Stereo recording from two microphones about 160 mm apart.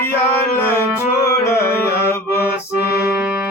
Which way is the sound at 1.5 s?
15° left (ahead or behind).